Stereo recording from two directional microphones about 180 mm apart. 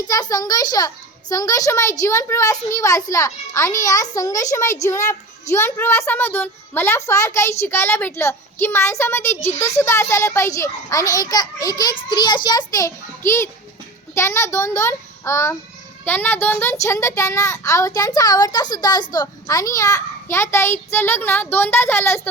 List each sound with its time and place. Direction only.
0.1 s a child's voice: 20° left (ahead or behind)